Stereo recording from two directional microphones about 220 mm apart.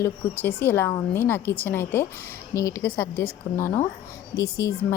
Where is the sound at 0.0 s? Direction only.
10° left (ahead or behind).